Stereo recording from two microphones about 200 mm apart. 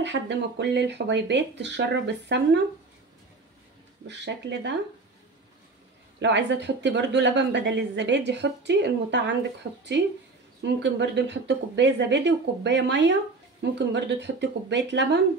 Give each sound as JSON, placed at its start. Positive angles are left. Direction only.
{"t": 0.0, "sound": "speech", "side_deg": -60}
{"t": 4.1, "sound": "speech", "side_deg": -60}
{"t": 6.1, "sound": "speech", "side_deg": -60}